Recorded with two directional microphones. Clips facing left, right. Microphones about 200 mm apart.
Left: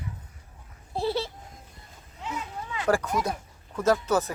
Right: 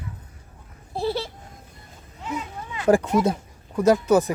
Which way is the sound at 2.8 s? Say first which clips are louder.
Right 7 dB; 25° right (ahead or behind).